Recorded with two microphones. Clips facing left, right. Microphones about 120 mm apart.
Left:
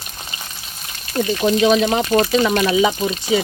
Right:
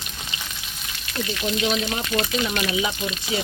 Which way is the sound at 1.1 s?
40° left (ahead or behind).